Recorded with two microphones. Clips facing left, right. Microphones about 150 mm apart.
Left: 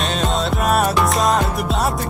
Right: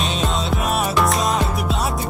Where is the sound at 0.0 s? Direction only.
Centre (ahead or behind).